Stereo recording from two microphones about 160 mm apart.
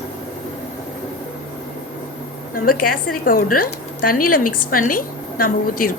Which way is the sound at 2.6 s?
65° left (ahead or behind).